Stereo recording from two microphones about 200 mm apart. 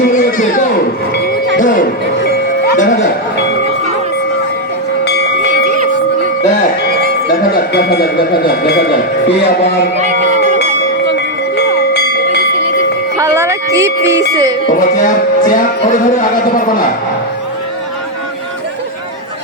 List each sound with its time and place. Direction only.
0.1 s a sound: 40° left (ahead or behind)
1.5 s music: 40° left (ahead or behind)
7.3 s music: 50° left (ahead or behind)
8.4 s speech: 55° left (ahead or behind)
10.0 s a sound: 35° right (ahead or behind)
11.5 s a sound: 55° left (ahead or behind)
13.1 s music: 15° right (ahead or behind)
13.7 s speech: 15° right (ahead or behind)
14.8 s music: 40° left (ahead or behind)